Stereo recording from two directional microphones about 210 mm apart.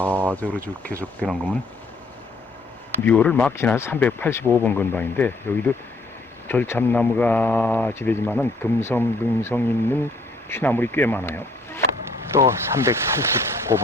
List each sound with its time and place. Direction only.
0.0 s a sound: 10° right (ahead or behind)
0.9 s speech: 5° right (ahead or behind)
3.0 s speech: 5° left (ahead or behind)
12.3 s speech: 10° right (ahead or behind)